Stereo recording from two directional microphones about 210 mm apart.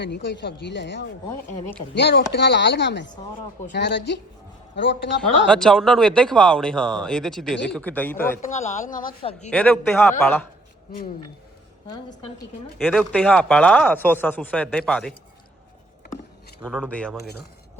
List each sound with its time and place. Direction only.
0.0 s chopping: 55° left (ahead or behind)
5.5 s speech: centre (ahead or behind)
8.4 s speech: 35° left (ahead or behind)
9.0 s speech: 30° left (ahead or behind)
9.5 s speech: 5° left (ahead or behind)
12.8 s speech: 5° left (ahead or behind)
16.6 s speech: centre (ahead or behind)